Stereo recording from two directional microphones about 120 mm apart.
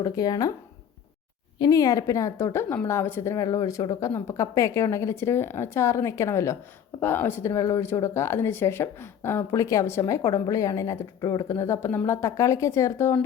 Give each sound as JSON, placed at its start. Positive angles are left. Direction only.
{"t": 0.0, "sound": "speech", "side_deg": 30}
{"t": 1.5, "sound": "speech", "side_deg": 30}